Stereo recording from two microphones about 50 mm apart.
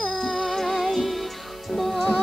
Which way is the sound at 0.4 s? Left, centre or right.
Centre.